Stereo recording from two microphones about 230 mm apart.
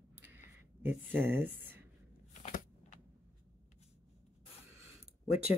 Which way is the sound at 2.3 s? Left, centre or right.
Left.